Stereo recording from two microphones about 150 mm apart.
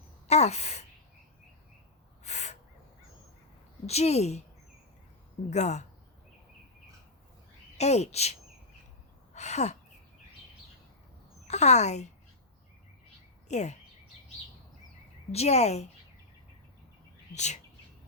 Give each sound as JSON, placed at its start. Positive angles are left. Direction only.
{"t": 0.3, "sound": "speech", "side_deg": 45}
{"t": 2.2, "sound": "owl", "side_deg": 50}
{"t": 3.8, "sound": "speech", "side_deg": 45}
{"t": 5.5, "sound": "speech", "side_deg": 50}
{"t": 7.8, "sound": "speech", "side_deg": 45}
{"t": 9.3, "sound": "a sound", "side_deg": 50}
{"t": 11.4, "sound": "a woman's voice", "side_deg": 45}
{"t": 13.5, "sound": "speech", "side_deg": 50}
{"t": 15.3, "sound": "speech", "side_deg": 45}
{"t": 17.3, "sound": "speech", "side_deg": 50}